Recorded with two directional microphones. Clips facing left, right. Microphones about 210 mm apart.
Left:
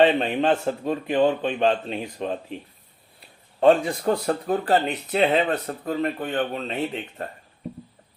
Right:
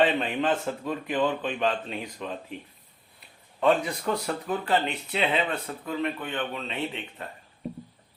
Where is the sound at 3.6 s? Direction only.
35° left (ahead or behind).